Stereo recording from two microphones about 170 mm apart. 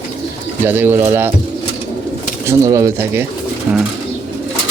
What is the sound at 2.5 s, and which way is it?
Speech, 20° right (ahead or behind).